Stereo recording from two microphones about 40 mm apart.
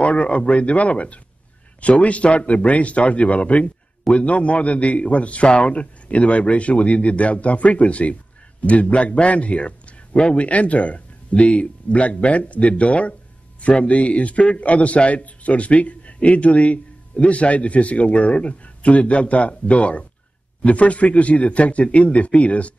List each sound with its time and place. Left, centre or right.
0.0 s a man's voice: left